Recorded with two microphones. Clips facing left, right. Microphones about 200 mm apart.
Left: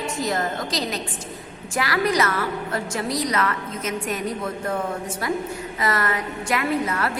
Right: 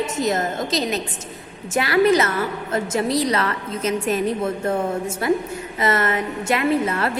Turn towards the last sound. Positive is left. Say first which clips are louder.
# right 4 dB
turn(degrees=-25)  # may be behind; listen again after turning